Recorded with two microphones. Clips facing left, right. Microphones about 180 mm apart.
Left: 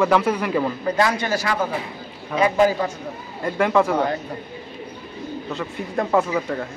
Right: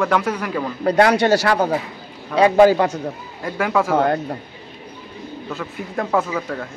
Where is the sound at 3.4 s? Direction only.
Centre (ahead or behind).